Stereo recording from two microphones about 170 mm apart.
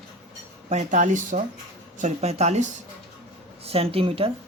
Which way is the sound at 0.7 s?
45° right (ahead or behind).